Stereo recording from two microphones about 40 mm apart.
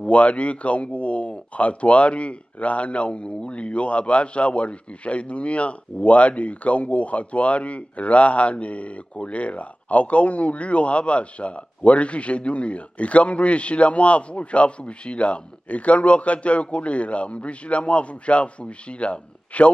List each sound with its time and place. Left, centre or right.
0.0 s speech: left